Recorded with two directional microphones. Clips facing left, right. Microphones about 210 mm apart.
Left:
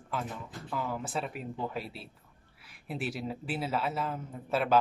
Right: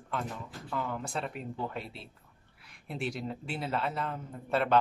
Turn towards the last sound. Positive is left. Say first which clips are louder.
# even
turn(degrees=5)  # may be behind; listen again after turning